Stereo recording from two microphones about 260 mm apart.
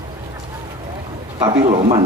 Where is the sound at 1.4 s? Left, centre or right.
Centre.